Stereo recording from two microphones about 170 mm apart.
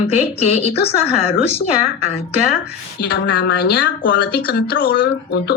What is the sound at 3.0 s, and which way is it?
Speech, 80° left.